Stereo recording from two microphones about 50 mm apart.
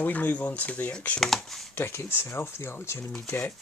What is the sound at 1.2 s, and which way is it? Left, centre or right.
Speech, centre.